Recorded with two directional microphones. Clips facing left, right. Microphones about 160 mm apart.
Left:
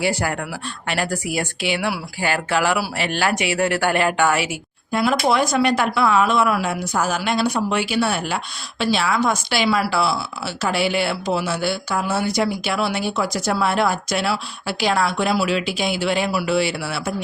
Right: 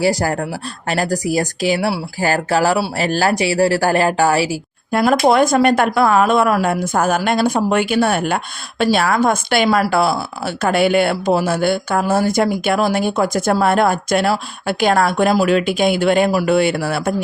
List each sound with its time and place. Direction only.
0.0 s speech: 40° right (ahead or behind)
4.9 s speech: 50° right (ahead or behind)